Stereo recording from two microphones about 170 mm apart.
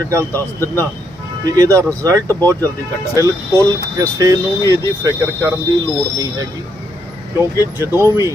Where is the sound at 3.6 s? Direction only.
20° right (ahead or behind).